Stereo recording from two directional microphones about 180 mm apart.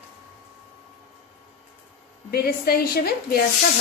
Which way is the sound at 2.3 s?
60° left (ahead or behind).